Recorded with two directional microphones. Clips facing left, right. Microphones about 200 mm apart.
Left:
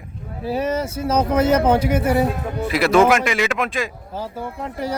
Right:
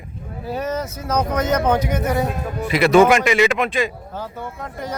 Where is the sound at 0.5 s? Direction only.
30° left (ahead or behind).